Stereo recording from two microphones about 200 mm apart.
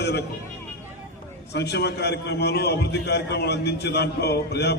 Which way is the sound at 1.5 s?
55° left (ahead or behind).